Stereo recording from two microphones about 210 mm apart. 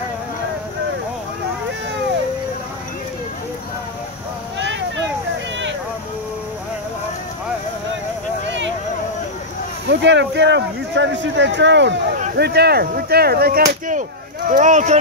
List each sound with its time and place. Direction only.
4.6 s a sound: 60° right (ahead or behind)
9.8 s speech: 55° right (ahead or behind)
12.4 s whip: 50° right (ahead or behind)
14.5 s speech: 35° right (ahead or behind)